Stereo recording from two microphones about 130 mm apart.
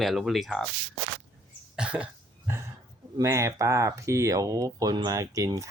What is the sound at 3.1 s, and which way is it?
Speech, 25° right (ahead or behind).